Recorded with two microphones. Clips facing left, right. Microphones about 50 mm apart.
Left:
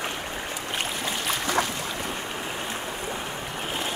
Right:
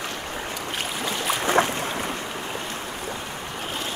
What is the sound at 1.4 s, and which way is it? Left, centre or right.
Boat, right.